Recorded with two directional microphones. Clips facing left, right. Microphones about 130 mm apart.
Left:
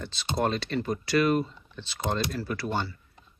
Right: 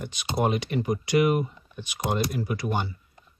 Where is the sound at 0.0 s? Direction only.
15° right (ahead or behind).